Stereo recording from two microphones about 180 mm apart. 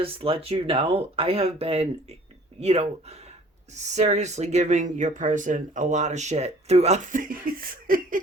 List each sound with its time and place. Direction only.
0.0 s speech: 30° right (ahead or behind); by 8.2 s 50° right (ahead or behind)